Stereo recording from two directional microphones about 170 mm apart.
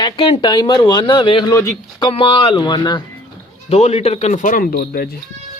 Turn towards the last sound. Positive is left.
turn(degrees=60)  # may be behind; listen again after turning